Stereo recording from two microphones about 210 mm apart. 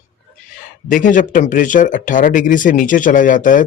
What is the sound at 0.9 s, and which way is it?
Speech, 40° left (ahead or behind).